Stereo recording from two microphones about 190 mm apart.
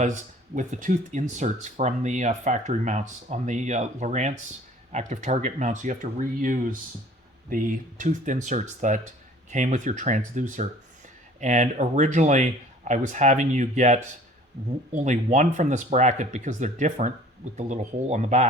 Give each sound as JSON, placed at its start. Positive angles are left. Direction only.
{"t": 0.0, "sound": "speech", "side_deg": -40}